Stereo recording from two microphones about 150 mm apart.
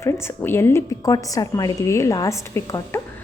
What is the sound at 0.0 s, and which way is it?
A woman's voice, 15° left (ahead or behind).